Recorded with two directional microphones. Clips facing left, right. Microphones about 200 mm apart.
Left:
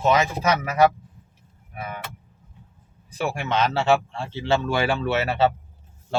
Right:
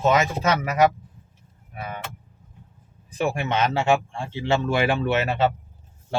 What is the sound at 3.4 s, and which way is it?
Speech, 20° right (ahead or behind).